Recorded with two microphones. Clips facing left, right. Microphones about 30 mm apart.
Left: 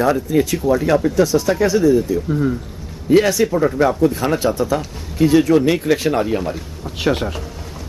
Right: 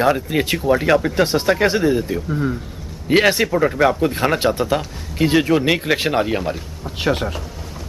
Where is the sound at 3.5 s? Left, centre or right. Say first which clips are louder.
Even; right.